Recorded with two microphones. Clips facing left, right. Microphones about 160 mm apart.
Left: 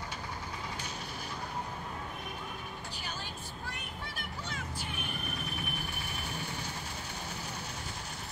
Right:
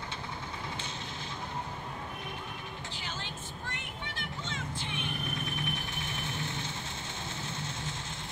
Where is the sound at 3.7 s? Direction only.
90° right.